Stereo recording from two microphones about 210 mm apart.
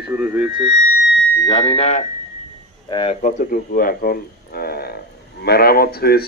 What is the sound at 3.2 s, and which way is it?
Speech, 40° left (ahead or behind).